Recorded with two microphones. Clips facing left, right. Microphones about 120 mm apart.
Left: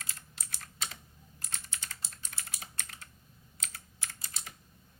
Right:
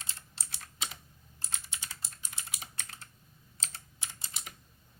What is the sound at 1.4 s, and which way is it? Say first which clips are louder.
Computer keyboard: right 1 dB; 30° right (ahead or behind).